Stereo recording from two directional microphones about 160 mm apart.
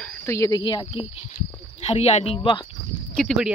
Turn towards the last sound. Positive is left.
turn(degrees=0)  # may be behind; listen again after turning